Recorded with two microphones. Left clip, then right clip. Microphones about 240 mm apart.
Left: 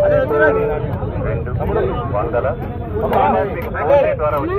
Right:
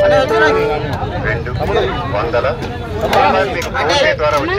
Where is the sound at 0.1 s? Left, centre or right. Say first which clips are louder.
Right 3 dB; right.